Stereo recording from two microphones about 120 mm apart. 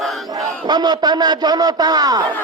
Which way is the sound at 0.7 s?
35° right (ahead or behind).